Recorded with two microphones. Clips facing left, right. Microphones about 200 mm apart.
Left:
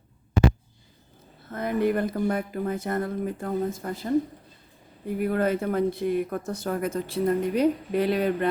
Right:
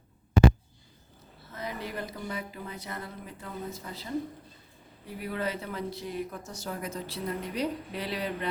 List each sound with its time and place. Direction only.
1.5 s speech: 55° left (ahead or behind)